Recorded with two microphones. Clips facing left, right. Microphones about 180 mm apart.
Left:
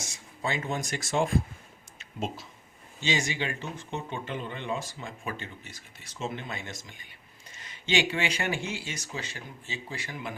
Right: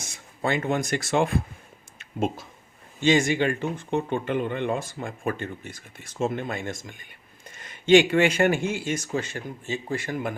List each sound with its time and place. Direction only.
0.0 s speech: 55° right (ahead or behind)
2.0 s speech: 55° right (ahead or behind)